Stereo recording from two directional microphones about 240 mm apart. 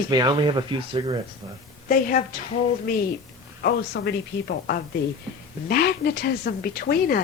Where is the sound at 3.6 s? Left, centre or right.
Left.